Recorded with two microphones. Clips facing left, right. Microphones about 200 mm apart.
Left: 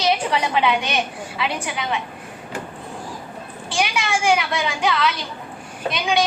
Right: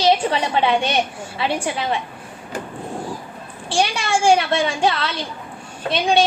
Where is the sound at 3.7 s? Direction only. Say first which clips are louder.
Right 3 dB; 30° right (ahead or behind).